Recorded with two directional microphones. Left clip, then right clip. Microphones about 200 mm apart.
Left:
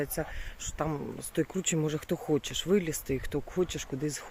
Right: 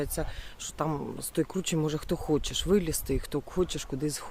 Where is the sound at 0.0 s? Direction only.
Centre (ahead or behind); by 3.2 s 20° right (ahead or behind).